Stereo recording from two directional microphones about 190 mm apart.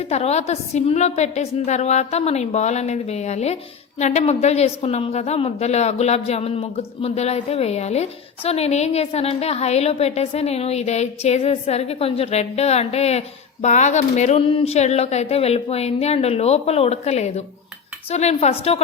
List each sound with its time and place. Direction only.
0.1 s a woman's voice: 35° left (ahead or behind)